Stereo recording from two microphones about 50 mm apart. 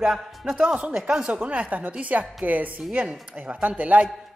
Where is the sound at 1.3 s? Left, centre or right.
Right.